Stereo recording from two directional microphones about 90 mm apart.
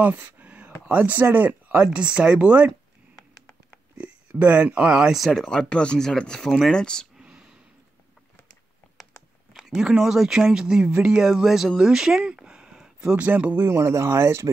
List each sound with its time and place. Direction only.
0.0 s a sound: 20° right (ahead or behind)
0.8 s speech: 20° right (ahead or behind)
4.0 s speech: 15° right (ahead or behind); by 7.1 s 10° left (ahead or behind)
7.2 s a sound: 10° right (ahead or behind)
9.5 s speech: centre (ahead or behind); by 13.7 s 15° right (ahead or behind)
13.7 s speech: 30° right (ahead or behind)